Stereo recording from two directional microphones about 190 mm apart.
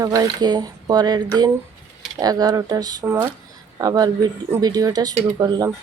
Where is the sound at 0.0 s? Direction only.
20° right (ahead or behind).